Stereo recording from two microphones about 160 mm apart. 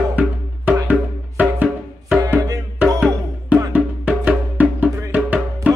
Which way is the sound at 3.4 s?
10° right (ahead or behind).